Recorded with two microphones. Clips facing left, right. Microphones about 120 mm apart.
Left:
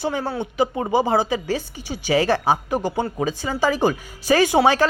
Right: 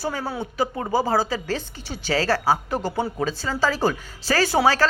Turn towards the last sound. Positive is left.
turn(degrees=15)  # may be behind; listen again after turning